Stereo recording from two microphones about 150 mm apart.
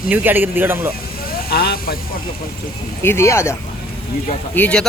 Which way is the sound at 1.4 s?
90° left.